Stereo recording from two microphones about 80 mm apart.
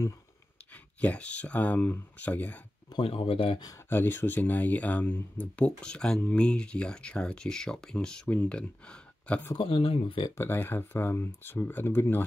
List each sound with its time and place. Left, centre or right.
0.7 s speech: centre
2.9 s speech: left
3.9 s speech: left
9.6 s speech: left
10.3 s speech: left